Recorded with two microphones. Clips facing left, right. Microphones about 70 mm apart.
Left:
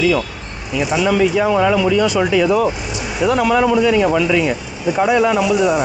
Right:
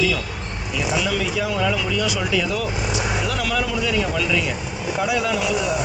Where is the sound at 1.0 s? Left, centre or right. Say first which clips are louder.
Left 9 dB; left.